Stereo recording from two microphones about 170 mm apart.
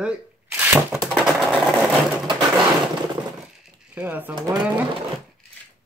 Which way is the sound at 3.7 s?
10° right (ahead or behind).